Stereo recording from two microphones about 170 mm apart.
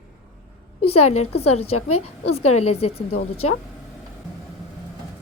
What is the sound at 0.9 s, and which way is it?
A woman's voice, 40° left (ahead or behind).